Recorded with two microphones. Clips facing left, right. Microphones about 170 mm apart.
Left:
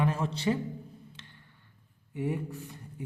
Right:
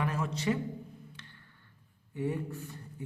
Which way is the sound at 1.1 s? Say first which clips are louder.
Even; 25° left (ahead or behind).